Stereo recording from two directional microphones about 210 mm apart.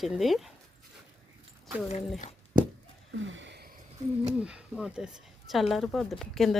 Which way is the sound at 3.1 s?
65° right (ahead or behind).